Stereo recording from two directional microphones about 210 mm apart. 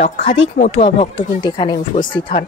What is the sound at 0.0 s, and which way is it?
Speech, 30° left (ahead or behind).